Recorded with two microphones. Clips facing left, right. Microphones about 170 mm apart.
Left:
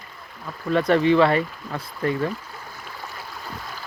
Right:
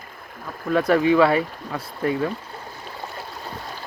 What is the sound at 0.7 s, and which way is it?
Speech, 5° right (ahead or behind).